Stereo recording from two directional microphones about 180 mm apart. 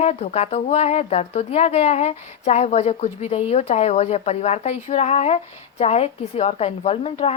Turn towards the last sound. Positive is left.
turn(degrees=35)  # may be behind; listen again after turning